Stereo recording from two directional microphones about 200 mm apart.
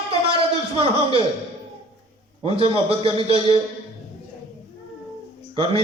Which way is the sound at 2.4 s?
30° right (ahead or behind).